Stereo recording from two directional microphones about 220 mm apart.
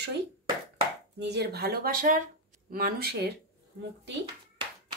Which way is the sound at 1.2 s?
50° right (ahead or behind).